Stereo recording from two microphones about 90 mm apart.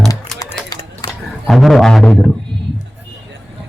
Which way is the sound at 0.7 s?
45° left (ahead or behind).